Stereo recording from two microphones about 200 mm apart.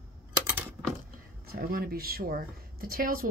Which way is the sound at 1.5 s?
45° right (ahead or behind).